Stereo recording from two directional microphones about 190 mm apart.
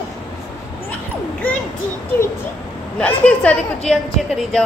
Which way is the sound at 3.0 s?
5° left (ahead or behind).